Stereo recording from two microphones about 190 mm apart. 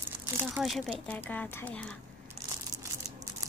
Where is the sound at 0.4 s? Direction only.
10° right (ahead or behind).